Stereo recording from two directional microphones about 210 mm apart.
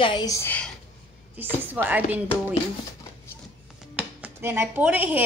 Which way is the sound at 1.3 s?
10° right (ahead or behind).